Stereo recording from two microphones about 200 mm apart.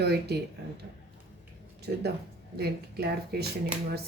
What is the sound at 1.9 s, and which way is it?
Speech, 55° right (ahead or behind).